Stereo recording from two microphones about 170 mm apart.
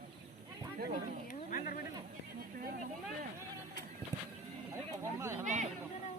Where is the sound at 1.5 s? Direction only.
55° left (ahead or behind).